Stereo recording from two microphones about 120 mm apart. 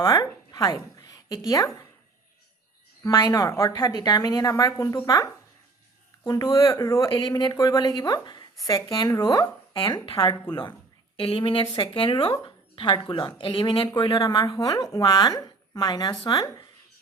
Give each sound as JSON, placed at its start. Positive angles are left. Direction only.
{"t": 0.0, "sound": "a woman's voice", "side_deg": 30}
{"t": 3.0, "sound": "speech", "side_deg": 30}
{"t": 3.8, "sound": "speech", "side_deg": 40}
{"t": 7.0, "sound": "speech", "side_deg": 40}
{"t": 11.2, "sound": "speech", "side_deg": 50}